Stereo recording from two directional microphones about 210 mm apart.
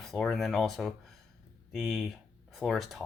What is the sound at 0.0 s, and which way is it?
Speech, centre (ahead or behind).